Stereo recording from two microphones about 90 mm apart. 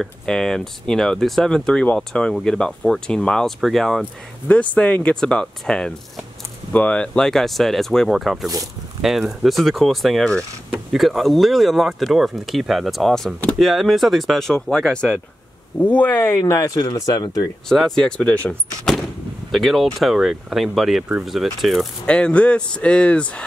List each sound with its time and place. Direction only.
0.0 s speech: 5° left (ahead or behind)
4.5 s speech: 15° left (ahead or behind)
16.4 s speech: 40° left (ahead or behind)
17.6 s speech: 5° left (ahead or behind)
19.5 s speech: centre (ahead or behind)
22.0 s speech: 10° left (ahead or behind)